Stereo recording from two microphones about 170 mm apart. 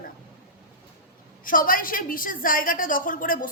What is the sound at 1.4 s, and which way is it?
A woman's voice, 55° left (ahead or behind).